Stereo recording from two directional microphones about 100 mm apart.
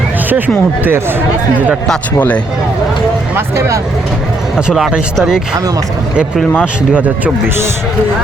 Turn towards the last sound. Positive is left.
turn(degrees=-15)  # may be behind; listen again after turning